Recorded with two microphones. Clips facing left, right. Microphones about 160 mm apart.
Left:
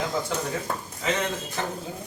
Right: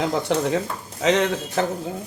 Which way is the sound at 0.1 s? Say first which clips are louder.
Right 7 dB; 70° right (ahead or behind).